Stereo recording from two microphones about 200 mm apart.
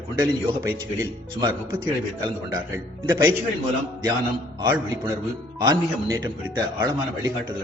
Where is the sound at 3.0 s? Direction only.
20° right (ahead or behind).